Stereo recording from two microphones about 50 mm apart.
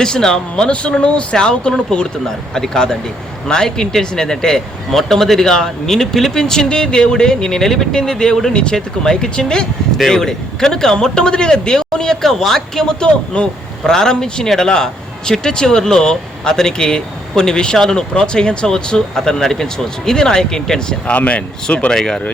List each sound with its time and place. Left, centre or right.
0.0 s a man's voice: centre
21.1 s speech: left
21.9 s a man's voice: centre